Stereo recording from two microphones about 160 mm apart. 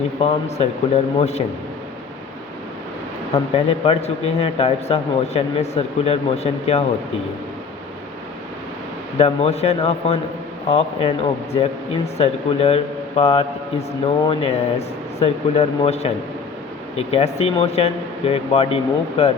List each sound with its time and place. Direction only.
0.2 s speech: 40° left (ahead or behind)
3.5 s speech: 40° left (ahead or behind)
9.1 s speech: 40° left (ahead or behind)